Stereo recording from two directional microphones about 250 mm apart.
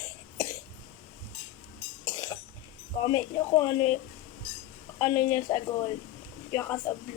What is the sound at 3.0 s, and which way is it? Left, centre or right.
Speech, centre.